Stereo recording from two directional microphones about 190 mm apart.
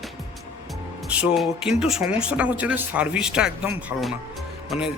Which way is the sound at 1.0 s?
5° right (ahead or behind).